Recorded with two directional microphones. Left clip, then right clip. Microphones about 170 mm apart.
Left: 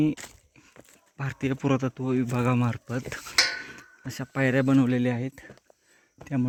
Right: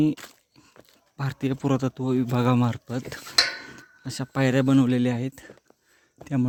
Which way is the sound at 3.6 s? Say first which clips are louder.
Left 1 dB; 20° right (ahead or behind).